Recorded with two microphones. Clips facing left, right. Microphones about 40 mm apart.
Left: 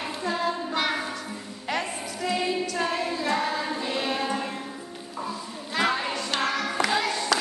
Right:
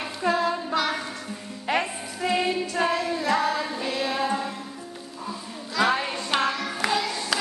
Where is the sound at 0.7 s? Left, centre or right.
Centre.